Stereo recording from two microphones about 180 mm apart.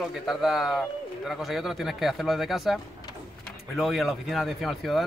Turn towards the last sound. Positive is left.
turn(degrees=0)  # may be behind; listen again after turning